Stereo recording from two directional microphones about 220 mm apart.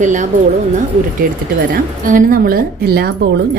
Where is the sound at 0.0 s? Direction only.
35° right (ahead or behind).